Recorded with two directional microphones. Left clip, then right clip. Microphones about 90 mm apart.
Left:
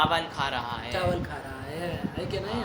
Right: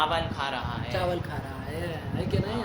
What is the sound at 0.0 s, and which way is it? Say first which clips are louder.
Speech: left 1 dB; 50° left (ahead or behind).